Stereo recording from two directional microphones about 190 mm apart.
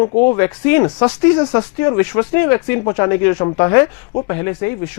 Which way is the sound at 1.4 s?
25° left (ahead or behind).